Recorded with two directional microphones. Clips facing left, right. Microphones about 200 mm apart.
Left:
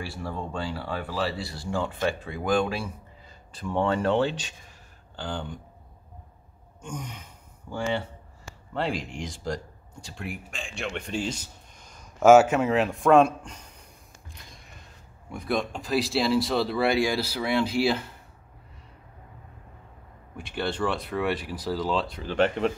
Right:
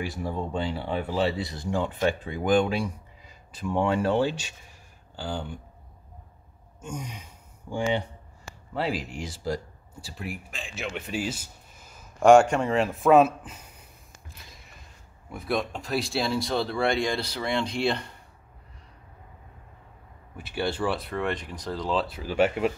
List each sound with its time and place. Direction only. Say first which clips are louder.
0.0 s speech: right 3 dB; 20° right (ahead or behind)
6.8 s speech: right 1 dB; 10° right (ahead or behind)
8.7 s speech: even; 5° right (ahead or behind)
14.5 s a sound: left 1 dB; centre (ahead or behind)
15.2 s speech: even; centre (ahead or behind)
20.3 s speech: right 1 dB; 5° right (ahead or behind)